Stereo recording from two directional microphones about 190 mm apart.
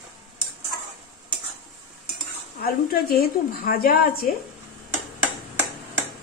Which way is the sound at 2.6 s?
50° left (ahead or behind).